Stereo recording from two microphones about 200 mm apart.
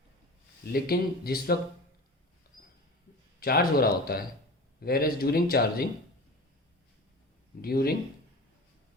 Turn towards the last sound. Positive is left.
turn(degrees=50)  # may be behind; listen again after turning